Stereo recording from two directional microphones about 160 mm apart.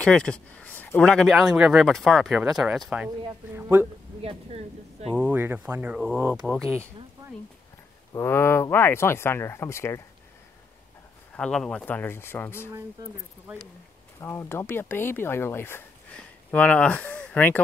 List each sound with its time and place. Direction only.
0.0 s speech: 5° left (ahead or behind); by 3.8 s 10° right (ahead or behind)
4.2 s speech: 40° right (ahead or behind)
5.1 s speech: 10° right (ahead or behind)
8.1 s speech: 15° left (ahead or behind)
11.3 s speech: 5° left (ahead or behind)
14.2 s speech: 15° left (ahead or behind)